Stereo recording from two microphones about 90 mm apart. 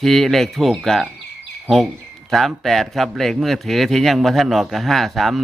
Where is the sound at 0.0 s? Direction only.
Centre (ahead or behind).